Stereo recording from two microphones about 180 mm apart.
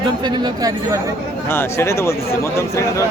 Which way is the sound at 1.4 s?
15° left (ahead or behind).